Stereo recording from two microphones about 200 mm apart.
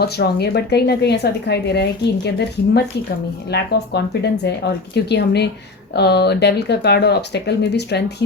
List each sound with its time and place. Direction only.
0.0 s a woman's voice: 55° left (ahead or behind)